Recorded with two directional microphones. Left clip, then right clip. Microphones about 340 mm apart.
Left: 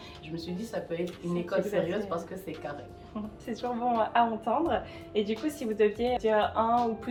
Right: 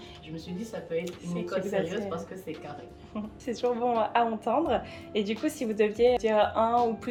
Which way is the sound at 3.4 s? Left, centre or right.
Right.